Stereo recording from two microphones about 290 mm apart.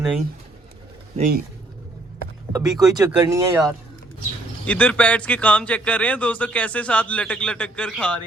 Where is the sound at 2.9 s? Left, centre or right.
Centre.